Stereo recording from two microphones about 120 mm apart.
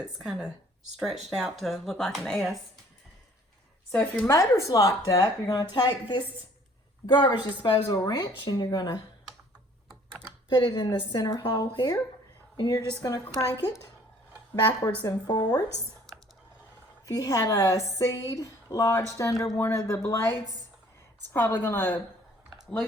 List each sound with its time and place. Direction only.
0.0 s speech: 5° right (ahead or behind)
3.9 s a woman's voice: 10° left (ahead or behind)
4.3 s a woman's voice: 25° left (ahead or behind)
10.5 s a woman's voice: 35° left (ahead or behind)
15.0 s a woman's voice: 35° left (ahead or behind)
17.1 s a woman's voice: 30° left (ahead or behind)